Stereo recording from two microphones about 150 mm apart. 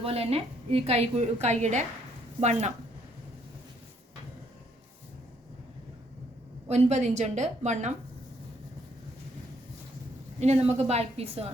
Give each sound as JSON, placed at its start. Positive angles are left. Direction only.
{"t": 0.0, "sound": "a woman's voice", "side_deg": -40}
{"t": 6.7, "sound": "a woman's voice", "side_deg": -45}
{"t": 10.4, "sound": "a woman's voice", "side_deg": -45}